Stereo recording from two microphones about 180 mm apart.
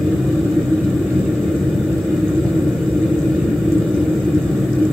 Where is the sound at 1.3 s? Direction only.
Centre (ahead or behind).